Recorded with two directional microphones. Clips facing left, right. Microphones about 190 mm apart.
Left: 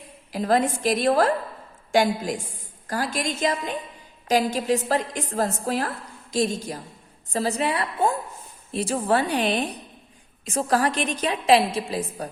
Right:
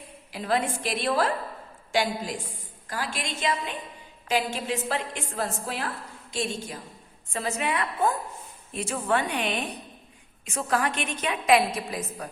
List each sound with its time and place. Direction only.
0.3 s a woman's voice: 40° left (ahead or behind)